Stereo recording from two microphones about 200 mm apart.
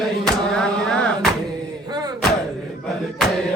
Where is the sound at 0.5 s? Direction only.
5° left (ahead or behind).